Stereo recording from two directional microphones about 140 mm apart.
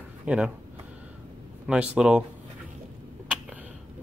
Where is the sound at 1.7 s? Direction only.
5° right (ahead or behind).